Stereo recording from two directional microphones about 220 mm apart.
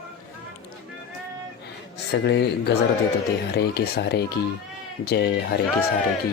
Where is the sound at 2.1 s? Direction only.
50° left (ahead or behind).